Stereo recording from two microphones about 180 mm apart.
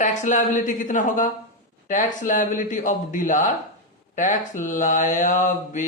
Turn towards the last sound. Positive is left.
turn(degrees=45)  # may be behind; listen again after turning